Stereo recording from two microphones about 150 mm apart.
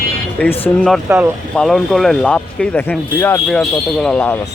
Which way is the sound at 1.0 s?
10° right (ahead or behind).